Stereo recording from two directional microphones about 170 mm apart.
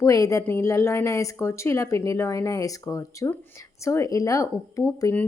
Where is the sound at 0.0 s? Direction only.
20° left (ahead or behind).